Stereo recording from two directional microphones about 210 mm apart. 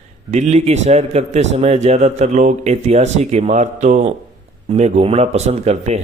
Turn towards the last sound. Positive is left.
turn(degrees=-30)  # may be behind; listen again after turning